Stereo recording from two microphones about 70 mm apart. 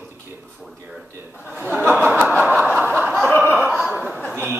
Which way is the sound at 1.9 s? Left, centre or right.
Right.